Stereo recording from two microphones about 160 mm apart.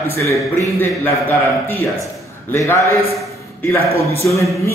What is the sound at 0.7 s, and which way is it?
A man's voice, 10° left (ahead or behind).